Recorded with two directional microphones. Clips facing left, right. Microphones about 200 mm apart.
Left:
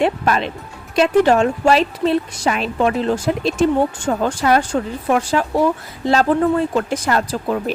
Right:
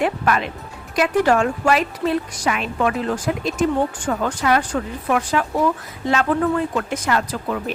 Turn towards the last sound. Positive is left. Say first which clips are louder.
# left 3 dB
turn(degrees=30)  # may be behind; listen again after turning